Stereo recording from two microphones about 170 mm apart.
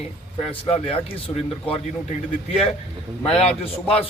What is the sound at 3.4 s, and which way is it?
Speech, 35° left (ahead or behind).